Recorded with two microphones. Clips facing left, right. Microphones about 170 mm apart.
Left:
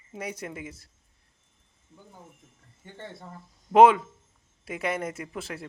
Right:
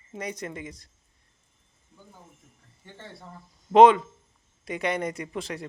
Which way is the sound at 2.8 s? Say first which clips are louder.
Left 3 dB; 20° left (ahead or behind).